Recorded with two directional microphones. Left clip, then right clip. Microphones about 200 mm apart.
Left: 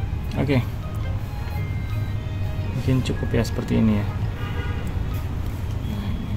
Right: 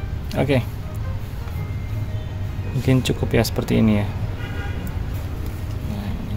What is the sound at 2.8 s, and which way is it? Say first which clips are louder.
Speech: right 5 dB; 30° right (ahead or behind).